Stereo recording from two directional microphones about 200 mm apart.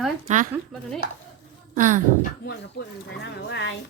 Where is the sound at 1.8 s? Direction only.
40° right (ahead or behind).